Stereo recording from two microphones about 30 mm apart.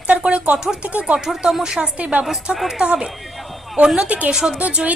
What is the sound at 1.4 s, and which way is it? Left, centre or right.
A woman's voice, right.